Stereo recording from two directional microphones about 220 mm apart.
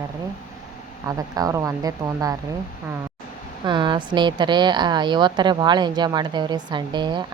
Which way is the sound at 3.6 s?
20° right (ahead or behind).